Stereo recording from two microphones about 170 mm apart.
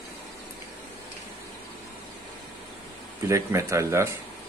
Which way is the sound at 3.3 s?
15° right (ahead or behind).